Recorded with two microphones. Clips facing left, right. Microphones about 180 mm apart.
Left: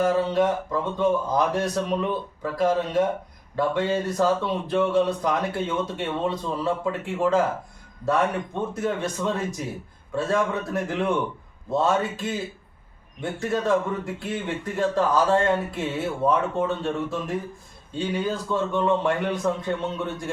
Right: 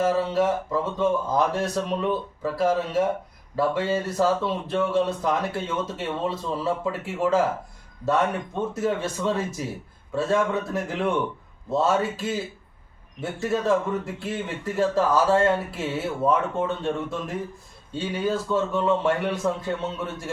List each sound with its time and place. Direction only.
0.0 s speech: 5° right (ahead or behind)